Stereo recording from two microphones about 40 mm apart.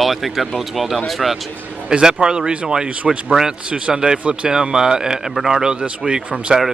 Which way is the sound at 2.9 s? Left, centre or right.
Right.